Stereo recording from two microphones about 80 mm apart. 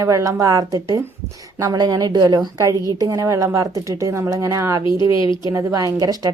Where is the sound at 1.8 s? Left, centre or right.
Right.